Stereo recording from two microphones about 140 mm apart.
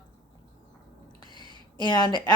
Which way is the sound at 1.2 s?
35° left (ahead or behind).